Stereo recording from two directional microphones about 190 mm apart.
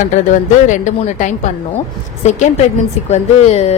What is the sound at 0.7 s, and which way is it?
A woman's voice, 40° left (ahead or behind).